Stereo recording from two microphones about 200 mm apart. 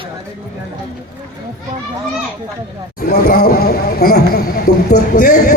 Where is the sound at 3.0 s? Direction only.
50° left (ahead or behind).